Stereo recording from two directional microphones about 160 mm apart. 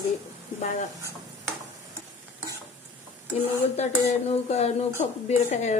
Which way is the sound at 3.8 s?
45° left (ahead or behind).